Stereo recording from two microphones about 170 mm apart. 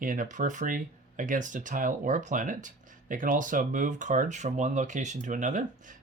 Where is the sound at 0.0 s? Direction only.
50° right (ahead or behind).